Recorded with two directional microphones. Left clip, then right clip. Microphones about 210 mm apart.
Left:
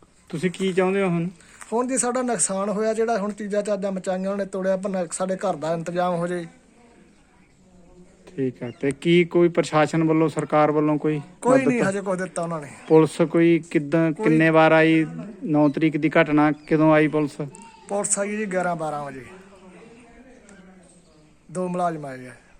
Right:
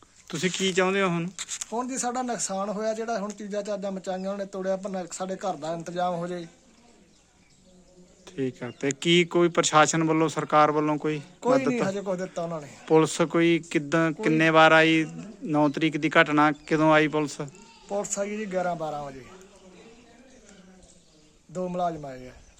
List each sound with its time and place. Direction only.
0.3 s speech: 5° right (ahead or behind)
1.7 s a man's voice: 50° left (ahead or behind)
5.9 s speech: 20° left (ahead or behind)
8.2 s speech: centre (ahead or behind)
11.3 s a man's voice: 5° right (ahead or behind)
12.9 s speech: 5° left (ahead or behind)
17.8 s a man's voice: 10° right (ahead or behind)
21.5 s a man's voice: 10° right (ahead or behind)